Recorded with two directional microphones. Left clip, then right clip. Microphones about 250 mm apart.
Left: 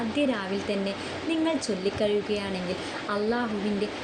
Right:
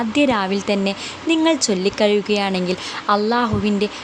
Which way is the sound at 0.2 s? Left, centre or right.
Right.